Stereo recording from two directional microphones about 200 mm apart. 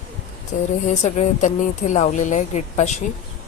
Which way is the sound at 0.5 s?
40° left (ahead or behind).